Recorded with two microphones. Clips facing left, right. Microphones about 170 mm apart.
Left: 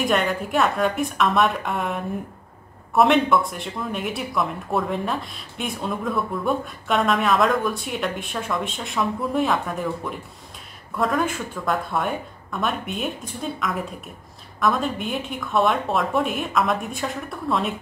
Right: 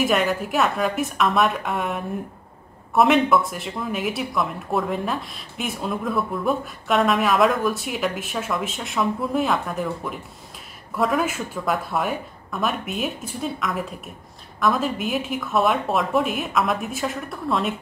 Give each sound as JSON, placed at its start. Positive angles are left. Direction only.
{"t": 0.0, "sound": "speech", "side_deg": 0}